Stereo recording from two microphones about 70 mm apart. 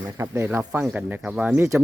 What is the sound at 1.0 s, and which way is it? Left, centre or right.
Speech, centre.